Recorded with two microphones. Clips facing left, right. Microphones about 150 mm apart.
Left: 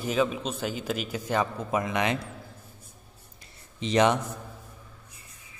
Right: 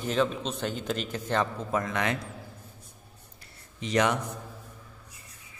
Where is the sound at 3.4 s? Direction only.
25° left (ahead or behind).